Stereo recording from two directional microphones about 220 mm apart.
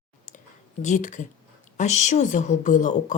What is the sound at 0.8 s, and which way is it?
Speech, 35° left (ahead or behind).